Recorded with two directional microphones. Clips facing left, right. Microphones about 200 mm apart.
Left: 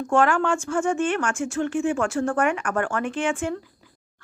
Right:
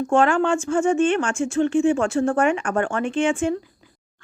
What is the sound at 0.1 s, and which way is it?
Speech, 25° right (ahead or behind).